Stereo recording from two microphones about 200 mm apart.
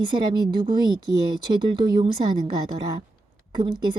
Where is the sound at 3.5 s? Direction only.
20° right (ahead or behind).